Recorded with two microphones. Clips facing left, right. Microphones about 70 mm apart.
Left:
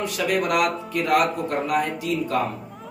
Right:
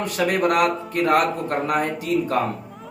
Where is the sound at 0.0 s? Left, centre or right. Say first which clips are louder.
Right 3 dB; right.